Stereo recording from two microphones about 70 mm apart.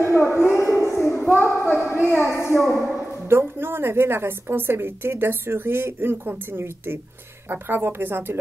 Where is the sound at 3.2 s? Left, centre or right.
Right.